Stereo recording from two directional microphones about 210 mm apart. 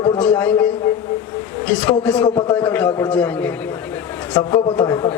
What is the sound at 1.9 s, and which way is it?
A man's voice, 5° left (ahead or behind).